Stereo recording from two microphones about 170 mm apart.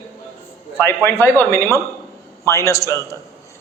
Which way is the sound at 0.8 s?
15° left (ahead or behind).